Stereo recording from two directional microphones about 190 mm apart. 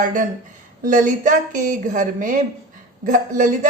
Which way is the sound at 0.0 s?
45° right (ahead or behind).